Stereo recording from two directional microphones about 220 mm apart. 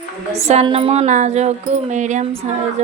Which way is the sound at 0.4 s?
25° right (ahead or behind).